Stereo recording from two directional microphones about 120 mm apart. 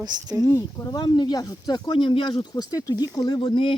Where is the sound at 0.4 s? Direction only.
25° left (ahead or behind).